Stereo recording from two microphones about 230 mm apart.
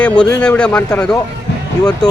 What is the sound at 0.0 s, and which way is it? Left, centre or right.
Speech, centre.